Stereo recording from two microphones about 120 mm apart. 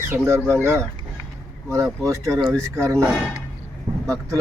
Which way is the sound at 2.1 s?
25° right (ahead or behind).